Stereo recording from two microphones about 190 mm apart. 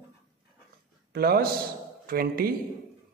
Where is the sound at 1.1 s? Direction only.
55° right (ahead or behind).